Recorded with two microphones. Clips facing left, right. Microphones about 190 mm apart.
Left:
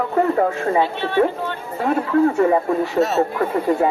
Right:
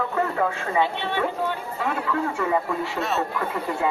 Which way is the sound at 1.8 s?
40° left (ahead or behind).